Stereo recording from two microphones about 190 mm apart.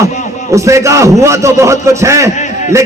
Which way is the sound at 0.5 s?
15° right (ahead or behind).